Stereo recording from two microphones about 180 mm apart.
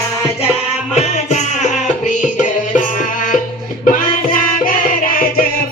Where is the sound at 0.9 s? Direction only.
40° left (ahead or behind).